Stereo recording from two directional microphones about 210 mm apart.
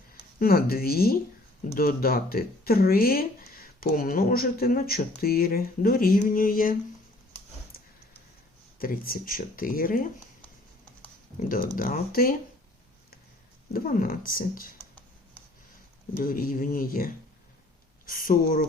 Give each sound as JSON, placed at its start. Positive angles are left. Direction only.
{"t": 0.1, "sound": "speech", "side_deg": 45}
{"t": 8.8, "sound": "speech", "side_deg": 45}
{"t": 11.3, "sound": "speech", "side_deg": 40}
{"t": 13.7, "sound": "speech", "side_deg": 40}
{"t": 16.2, "sound": "speech", "side_deg": 40}